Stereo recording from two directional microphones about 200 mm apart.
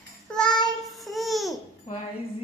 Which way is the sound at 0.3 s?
5° left (ahead or behind).